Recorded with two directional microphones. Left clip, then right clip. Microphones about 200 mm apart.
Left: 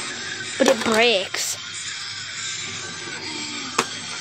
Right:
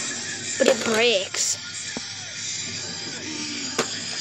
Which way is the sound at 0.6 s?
20° left (ahead or behind).